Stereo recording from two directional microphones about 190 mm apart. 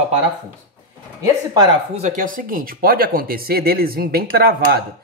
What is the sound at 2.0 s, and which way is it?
Dishes, 40° right (ahead or behind).